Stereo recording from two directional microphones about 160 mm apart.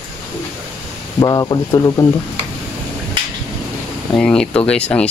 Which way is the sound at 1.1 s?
25° left (ahead or behind).